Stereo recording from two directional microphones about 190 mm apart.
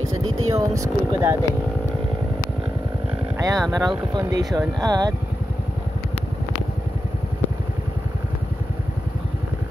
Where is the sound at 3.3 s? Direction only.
20° right (ahead or behind).